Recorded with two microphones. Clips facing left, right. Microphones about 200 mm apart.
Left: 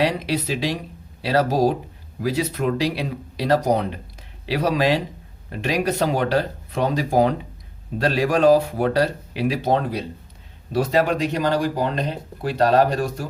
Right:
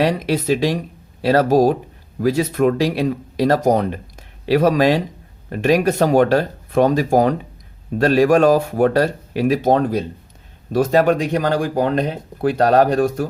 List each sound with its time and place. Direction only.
0.0 s speech: 50° right (ahead or behind)